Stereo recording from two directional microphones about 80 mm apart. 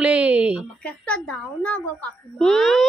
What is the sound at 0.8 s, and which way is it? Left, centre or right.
A woman's voice, centre.